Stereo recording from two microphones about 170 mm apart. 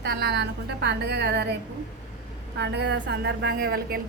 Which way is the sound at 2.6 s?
85° right.